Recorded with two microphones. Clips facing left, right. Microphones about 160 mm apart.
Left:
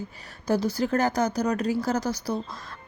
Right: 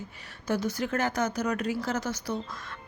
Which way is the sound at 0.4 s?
35° left (ahead or behind).